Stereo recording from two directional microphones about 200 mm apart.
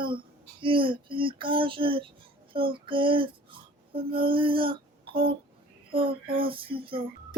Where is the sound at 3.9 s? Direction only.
25° right (ahead or behind).